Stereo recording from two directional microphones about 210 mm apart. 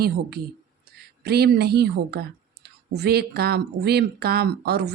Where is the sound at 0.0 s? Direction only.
50° right (ahead or behind).